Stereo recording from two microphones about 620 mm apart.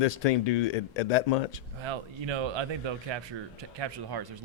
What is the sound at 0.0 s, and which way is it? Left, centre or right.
Speech, left.